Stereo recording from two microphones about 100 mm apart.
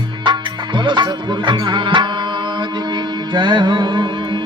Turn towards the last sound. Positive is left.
turn(degrees=-50)  # may be behind; listen again after turning